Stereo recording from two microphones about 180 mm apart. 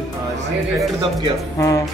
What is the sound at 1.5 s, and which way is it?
Speech, 15° left (ahead or behind).